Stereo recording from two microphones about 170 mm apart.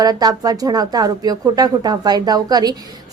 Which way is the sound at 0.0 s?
25° right (ahead or behind).